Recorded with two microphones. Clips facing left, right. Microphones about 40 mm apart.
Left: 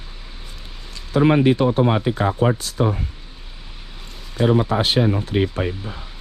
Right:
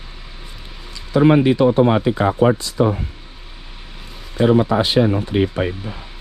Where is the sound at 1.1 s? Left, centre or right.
Right.